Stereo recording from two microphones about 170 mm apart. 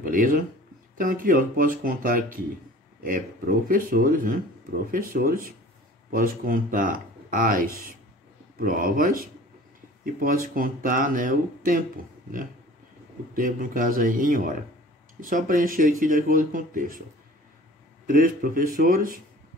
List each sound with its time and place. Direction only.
0.0 s speech: 55° right (ahead or behind)
13.3 s speech: 55° right (ahead or behind)
18.0 s speech: 55° right (ahead or behind)